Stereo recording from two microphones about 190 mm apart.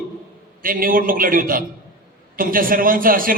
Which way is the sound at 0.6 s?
50° right (ahead or behind).